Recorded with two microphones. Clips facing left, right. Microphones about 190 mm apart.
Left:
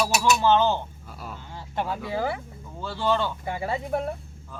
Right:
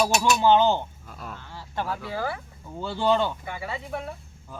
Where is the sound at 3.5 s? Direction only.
40° left (ahead or behind).